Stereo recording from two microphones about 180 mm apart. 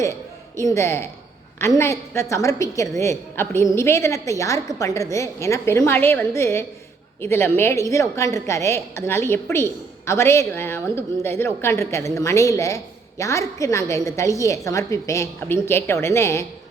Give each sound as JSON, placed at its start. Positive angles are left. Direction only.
{"t": 0.6, "sound": "a woman's voice", "side_deg": 15}